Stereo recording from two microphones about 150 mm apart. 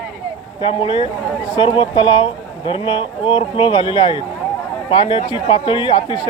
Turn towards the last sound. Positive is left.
turn(degrees=35)  # may be behind; listen again after turning